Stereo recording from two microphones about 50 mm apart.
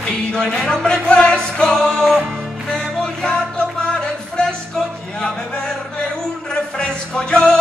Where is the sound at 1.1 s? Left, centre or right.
Centre.